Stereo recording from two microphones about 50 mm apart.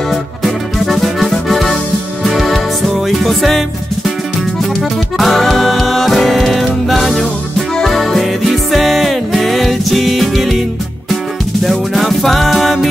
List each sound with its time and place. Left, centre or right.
0.1 s music: centre
5.1 s music: centre
11.6 s music: centre